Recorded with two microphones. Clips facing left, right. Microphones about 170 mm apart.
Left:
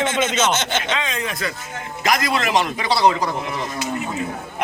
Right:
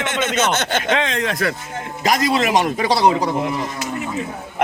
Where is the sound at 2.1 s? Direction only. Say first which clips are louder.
Right 3 dB; 35° right (ahead or behind).